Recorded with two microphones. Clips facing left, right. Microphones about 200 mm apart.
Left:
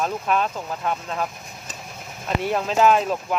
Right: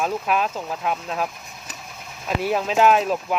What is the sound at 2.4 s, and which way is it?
Speech, 5° right (ahead or behind).